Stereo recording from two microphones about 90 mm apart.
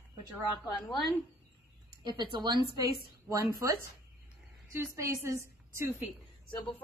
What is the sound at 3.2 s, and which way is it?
Speech, 35° right (ahead or behind).